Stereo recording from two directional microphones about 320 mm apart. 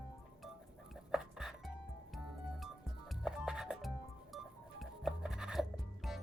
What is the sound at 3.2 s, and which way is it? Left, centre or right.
Music, centre.